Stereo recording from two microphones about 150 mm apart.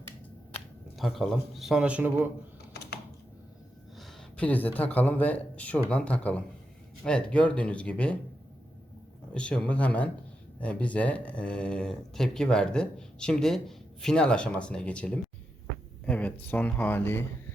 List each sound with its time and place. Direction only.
0.9 s a man's voice: centre (ahead or behind)
2.7 s typing: 90° left
3.9 s speech: 10° left (ahead or behind)
9.3 s speech: 5° left (ahead or behind)